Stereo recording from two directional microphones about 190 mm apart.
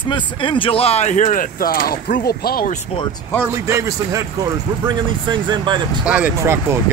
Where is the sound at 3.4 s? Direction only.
15° right (ahead or behind).